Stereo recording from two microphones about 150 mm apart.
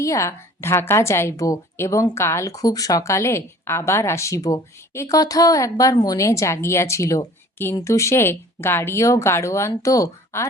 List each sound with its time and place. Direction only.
0.0 s a woman's voice: 20° left (ahead or behind)